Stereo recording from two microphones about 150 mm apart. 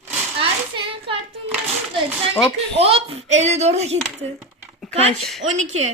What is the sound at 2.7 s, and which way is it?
A child's voice, 40° right (ahead or behind).